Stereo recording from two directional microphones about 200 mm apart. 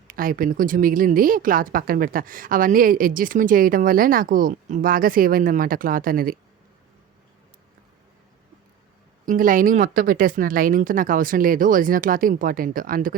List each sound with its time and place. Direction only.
0.1 s speech: 45° right (ahead or behind)
9.2 s speech: 40° right (ahead or behind)